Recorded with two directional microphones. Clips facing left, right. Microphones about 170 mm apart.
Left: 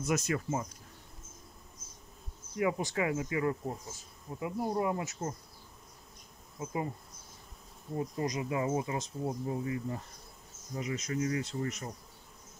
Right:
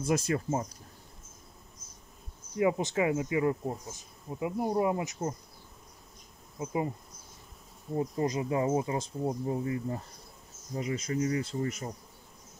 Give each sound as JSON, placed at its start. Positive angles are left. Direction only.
{"t": 0.0, "sound": "speech", "side_deg": -30}
{"t": 2.5, "sound": "speech", "side_deg": -25}
{"t": 6.6, "sound": "speech", "side_deg": -20}
{"t": 7.9, "sound": "speech", "side_deg": -30}